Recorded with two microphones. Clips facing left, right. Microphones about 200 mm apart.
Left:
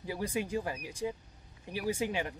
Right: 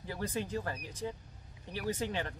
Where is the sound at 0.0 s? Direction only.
10° left (ahead or behind).